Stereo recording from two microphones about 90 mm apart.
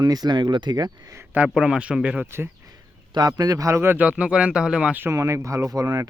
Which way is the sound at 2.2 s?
25° right (ahead or behind).